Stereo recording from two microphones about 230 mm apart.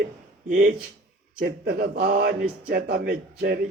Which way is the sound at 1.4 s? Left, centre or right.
Right.